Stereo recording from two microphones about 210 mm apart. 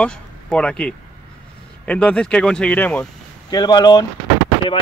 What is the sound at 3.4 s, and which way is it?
Speech, 20° left (ahead or behind).